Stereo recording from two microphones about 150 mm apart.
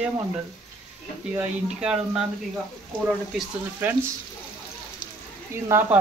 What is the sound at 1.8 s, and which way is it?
Speech, 5° right (ahead or behind).